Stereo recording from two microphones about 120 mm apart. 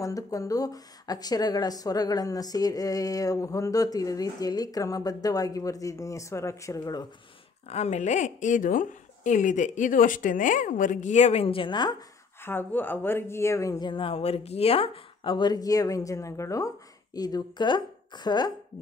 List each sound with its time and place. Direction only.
0.0 s speech: 30° left (ahead or behind)
7.7 s a woman's voice: 70° left (ahead or behind)
11.4 s speech: 45° left (ahead or behind)
12.4 s speech: 15° left (ahead or behind)
13.8 s speech: 45° left (ahead or behind)